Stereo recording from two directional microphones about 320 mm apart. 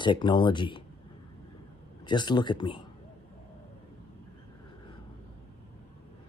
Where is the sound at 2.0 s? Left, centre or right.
Centre.